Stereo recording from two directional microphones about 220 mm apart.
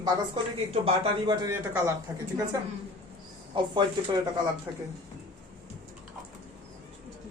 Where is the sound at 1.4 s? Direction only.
15° right (ahead or behind).